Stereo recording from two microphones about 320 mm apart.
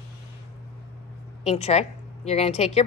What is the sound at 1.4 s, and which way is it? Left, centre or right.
A woman's voice, centre.